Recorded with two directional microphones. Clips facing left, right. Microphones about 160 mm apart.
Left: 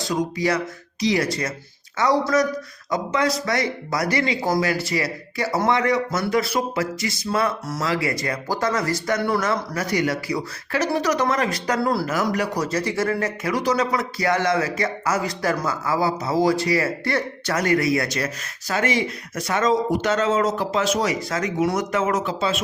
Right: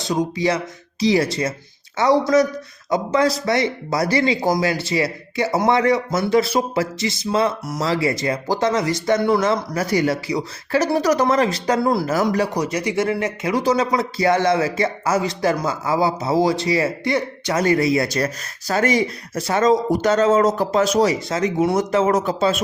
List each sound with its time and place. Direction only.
0.0 s speech: 25° right (ahead or behind)
10.8 s speech: 35° right (ahead or behind); by 12.0 s 20° right (ahead or behind)
12.0 s speech: 30° right (ahead or behind)
12.5 s speech: 15° right (ahead or behind)
17.6 s speech: 25° right (ahead or behind)
18.7 s speech: 40° right (ahead or behind)